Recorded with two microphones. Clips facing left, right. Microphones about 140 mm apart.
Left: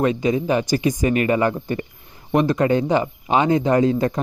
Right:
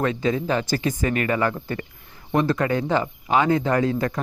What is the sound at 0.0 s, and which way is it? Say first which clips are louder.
Speech: left 3 dB; 20° left (ahead or behind).